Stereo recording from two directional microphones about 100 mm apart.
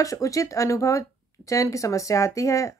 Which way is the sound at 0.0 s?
35° left (ahead or behind).